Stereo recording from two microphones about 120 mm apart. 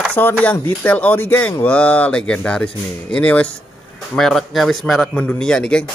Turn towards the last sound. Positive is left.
turn(degrees=5)  # may be behind; listen again after turning